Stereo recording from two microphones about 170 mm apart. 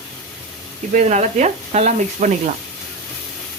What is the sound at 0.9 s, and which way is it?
Speech, 45° right (ahead or behind).